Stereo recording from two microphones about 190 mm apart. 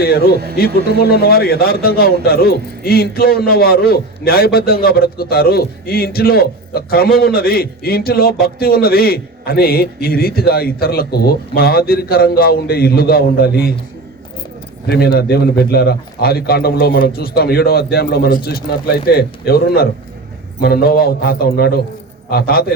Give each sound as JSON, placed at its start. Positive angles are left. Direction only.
{"t": 0.5, "sound": "a man's voice", "side_deg": 55}
{"t": 14.8, "sound": "a man's voice", "side_deg": 55}